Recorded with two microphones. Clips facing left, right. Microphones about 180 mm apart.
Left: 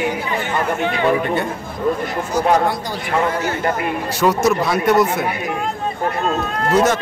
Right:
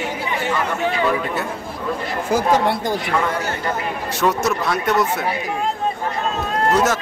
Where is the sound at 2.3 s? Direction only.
90° right.